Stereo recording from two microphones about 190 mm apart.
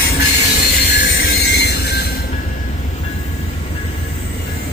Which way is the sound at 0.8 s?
60° left (ahead or behind).